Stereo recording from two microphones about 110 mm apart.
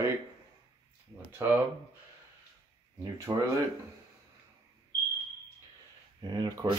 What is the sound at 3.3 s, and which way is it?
Speech, 30° right (ahead or behind).